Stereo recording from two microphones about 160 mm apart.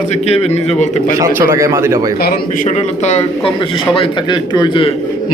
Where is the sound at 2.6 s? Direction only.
45° left (ahead or behind).